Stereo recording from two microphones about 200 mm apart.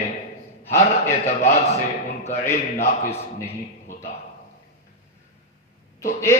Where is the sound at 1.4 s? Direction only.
30° left (ahead or behind).